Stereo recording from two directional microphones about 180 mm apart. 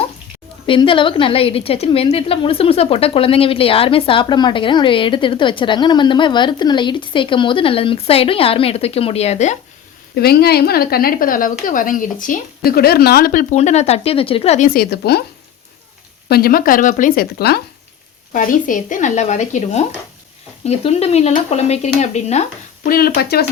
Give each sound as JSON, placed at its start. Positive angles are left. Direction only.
{"t": 0.7, "sound": "a woman's voice", "side_deg": 30}
{"t": 10.2, "sound": "speech", "side_deg": 60}
{"t": 14.7, "sound": "speech", "side_deg": 60}
{"t": 16.3, "sound": "speech", "side_deg": 55}
{"t": 18.3, "sound": "speech", "side_deg": 50}
{"t": 22.9, "sound": "speech", "side_deg": 55}